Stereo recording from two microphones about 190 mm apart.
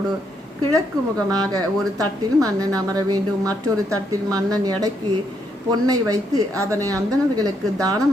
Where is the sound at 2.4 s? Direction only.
20° right (ahead or behind).